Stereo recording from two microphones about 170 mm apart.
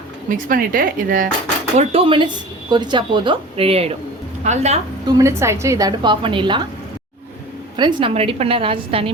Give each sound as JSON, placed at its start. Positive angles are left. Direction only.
{"t": 0.3, "sound": "speech", "side_deg": -55}
{"t": 1.8, "sound": "a woman's voice", "side_deg": -35}
{"t": 5.0, "sound": "a woman's voice", "side_deg": -20}
{"t": 7.8, "sound": "a woman's voice", "side_deg": -25}